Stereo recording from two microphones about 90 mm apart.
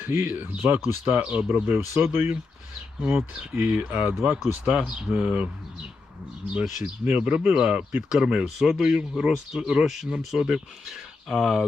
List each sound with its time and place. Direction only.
0.0 s speech: 25° right (ahead or behind)
3.5 s speech: 15° right (ahead or behind)
6.5 s speech: 10° right (ahead or behind)